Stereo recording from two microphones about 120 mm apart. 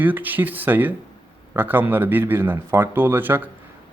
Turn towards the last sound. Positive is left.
turn(degrees=-20)  # may be behind; listen again after turning